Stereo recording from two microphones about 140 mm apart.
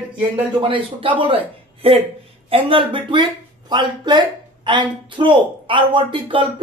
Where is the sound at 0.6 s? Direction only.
35° right (ahead or behind).